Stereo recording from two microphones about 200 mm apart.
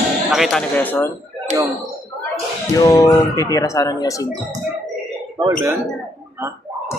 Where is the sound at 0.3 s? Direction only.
Centre (ahead or behind).